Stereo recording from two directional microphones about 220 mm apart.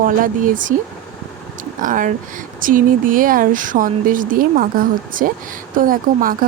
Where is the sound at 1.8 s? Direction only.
35° right (ahead or behind).